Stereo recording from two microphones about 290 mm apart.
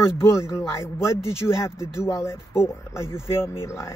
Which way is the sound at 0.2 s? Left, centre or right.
Centre.